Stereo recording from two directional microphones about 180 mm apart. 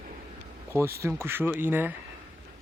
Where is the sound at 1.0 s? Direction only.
15° right (ahead or behind).